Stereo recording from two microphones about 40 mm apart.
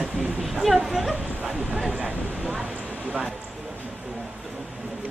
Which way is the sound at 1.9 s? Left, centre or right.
Right.